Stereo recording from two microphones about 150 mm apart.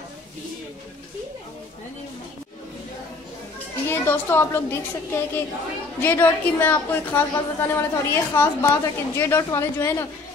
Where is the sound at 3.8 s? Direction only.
15° left (ahead or behind).